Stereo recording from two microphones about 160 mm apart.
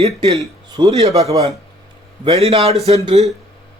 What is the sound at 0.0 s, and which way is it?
A man's voice, 40° right (ahead or behind).